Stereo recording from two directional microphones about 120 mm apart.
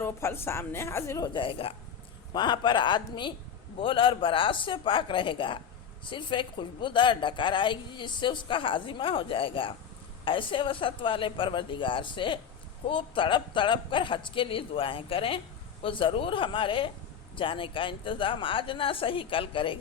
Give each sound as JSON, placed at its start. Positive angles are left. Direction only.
{"t": 0.0, "sound": "a woman's voice", "side_deg": 20}
{"t": 1.2, "sound": "a woman's voice", "side_deg": 40}
{"t": 2.3, "sound": "a man's voice", "side_deg": 40}